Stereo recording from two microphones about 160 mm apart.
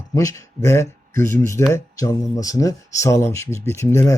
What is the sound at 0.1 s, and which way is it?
Speech, 20° left (ahead or behind).